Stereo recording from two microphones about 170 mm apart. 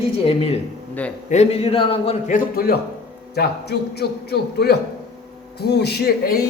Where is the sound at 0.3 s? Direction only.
35° left (ahead or behind).